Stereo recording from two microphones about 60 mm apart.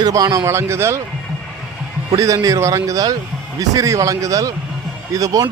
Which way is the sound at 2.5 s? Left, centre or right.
Right.